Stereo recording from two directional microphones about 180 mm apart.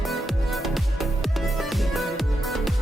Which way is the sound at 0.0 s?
Centre (ahead or behind).